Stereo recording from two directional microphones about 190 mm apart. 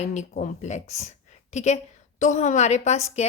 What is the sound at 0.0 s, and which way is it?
A woman's voice, 35° left (ahead or behind).